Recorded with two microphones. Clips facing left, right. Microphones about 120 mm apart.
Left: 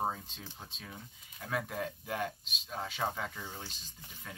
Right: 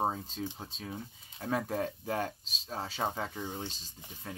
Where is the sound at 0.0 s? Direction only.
30° right (ahead or behind).